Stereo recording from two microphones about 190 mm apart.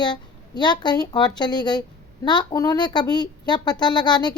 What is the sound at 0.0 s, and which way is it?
A woman's voice, 25° left (ahead or behind).